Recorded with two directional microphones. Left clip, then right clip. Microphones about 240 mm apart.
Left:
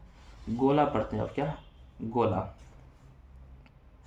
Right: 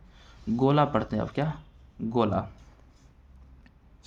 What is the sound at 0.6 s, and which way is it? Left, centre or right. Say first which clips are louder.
Speech: right 1 dB; right.